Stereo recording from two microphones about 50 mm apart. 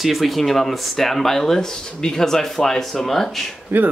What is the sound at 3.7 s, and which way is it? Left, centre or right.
Speech, right.